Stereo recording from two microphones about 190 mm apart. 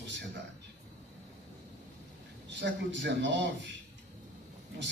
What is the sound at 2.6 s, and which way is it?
Speech, 70° right (ahead or behind).